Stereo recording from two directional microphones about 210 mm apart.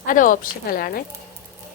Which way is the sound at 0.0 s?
40° left (ahead or behind).